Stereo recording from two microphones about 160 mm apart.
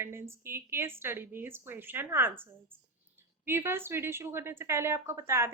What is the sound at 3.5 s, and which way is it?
A woman's voice, 15° right (ahead or behind).